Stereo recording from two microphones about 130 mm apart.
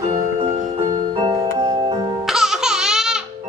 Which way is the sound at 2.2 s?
5° right (ahead or behind).